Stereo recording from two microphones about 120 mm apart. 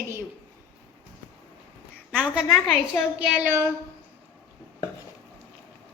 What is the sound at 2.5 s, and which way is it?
Speech, 5° left (ahead or behind).